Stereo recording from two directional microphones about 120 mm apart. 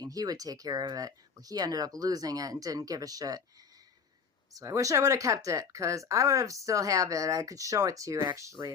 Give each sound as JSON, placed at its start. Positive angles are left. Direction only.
{"t": 0.0, "sound": "speech", "side_deg": -30}
{"t": 4.5, "sound": "speech", "side_deg": -30}